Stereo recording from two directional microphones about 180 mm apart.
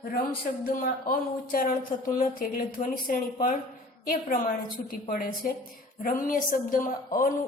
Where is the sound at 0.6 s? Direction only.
55° left (ahead or behind).